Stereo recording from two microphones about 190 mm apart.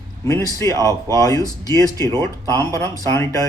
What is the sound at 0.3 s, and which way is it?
Speech, 15° left (ahead or behind).